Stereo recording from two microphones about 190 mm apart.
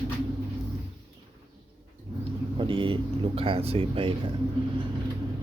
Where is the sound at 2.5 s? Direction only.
25° right (ahead or behind).